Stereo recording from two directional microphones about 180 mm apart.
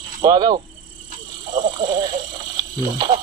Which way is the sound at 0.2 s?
25° right (ahead or behind).